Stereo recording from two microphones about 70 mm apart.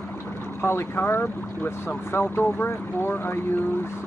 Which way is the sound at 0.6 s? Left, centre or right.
Left.